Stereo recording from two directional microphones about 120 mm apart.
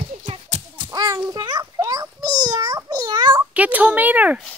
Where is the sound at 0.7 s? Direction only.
40° right (ahead or behind).